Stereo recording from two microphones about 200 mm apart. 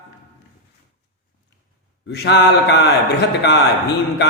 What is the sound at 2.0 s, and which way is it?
A man's voice, 55° left (ahead or behind).